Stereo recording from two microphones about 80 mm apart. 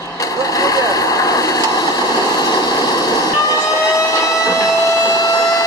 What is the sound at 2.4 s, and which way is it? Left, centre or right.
Vehicle, left.